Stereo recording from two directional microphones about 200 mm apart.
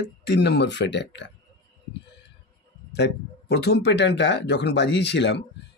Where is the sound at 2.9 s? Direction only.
55° left (ahead or behind).